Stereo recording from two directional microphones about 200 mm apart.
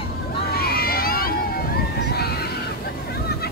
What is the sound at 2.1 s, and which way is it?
Music, 50° left (ahead or behind).